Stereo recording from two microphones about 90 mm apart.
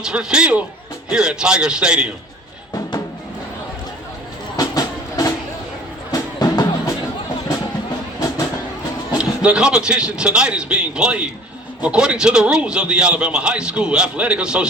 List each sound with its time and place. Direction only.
0.0 s a man's voice: 10° right (ahead or behind)
4.5 s train: 40° left (ahead or behind)
6.1 s music: 40° left (ahead or behind)
9.1 s a man's voice: 10° right (ahead or behind)